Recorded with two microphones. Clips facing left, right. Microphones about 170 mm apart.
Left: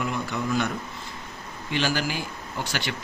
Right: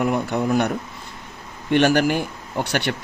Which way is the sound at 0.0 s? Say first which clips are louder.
Right 7 dB; 55° right (ahead or behind).